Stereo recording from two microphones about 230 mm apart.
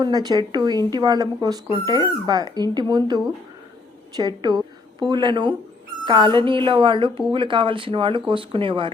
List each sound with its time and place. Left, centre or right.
0.0 s a woman's voice: centre